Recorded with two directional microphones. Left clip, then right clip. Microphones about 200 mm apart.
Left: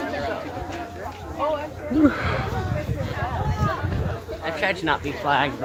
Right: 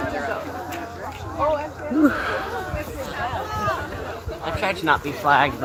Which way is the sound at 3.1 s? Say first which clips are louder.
Right 3 dB; 55° right (ahead or behind).